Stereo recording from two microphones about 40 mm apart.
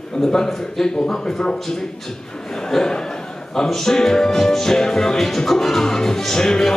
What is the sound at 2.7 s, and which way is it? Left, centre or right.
Music, centre.